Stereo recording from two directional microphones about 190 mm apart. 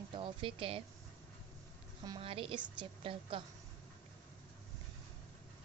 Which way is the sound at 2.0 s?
25° right (ahead or behind).